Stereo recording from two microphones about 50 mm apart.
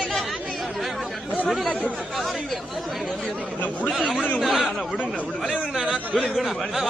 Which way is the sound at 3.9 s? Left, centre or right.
Centre.